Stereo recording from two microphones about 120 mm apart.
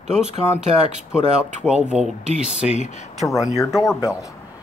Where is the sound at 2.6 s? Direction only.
60° left (ahead or behind).